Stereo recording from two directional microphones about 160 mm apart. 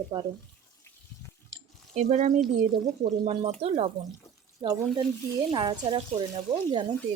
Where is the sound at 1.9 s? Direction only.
45° right (ahead or behind).